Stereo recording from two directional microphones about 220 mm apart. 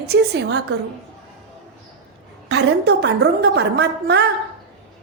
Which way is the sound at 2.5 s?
50° right (ahead or behind).